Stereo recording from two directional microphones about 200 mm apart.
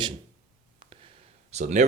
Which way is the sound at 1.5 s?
35° right (ahead or behind).